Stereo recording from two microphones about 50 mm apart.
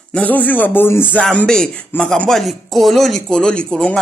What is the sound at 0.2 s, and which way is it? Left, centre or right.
Speech, left.